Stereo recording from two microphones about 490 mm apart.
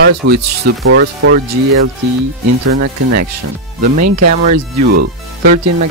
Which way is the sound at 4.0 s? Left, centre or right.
Right.